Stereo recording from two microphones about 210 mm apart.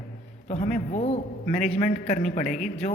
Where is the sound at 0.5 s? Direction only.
35° left (ahead or behind).